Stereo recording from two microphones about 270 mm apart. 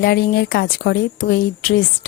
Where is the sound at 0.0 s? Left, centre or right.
Left.